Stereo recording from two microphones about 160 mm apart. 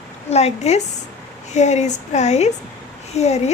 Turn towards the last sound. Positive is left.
turn(degrees=45)  # may be behind; listen again after turning